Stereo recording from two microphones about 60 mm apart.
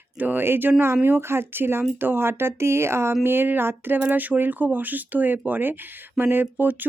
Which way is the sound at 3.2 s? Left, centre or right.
Right.